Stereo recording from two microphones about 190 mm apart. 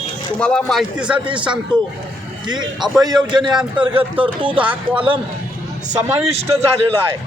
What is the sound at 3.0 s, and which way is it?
Speech, 20° right (ahead or behind).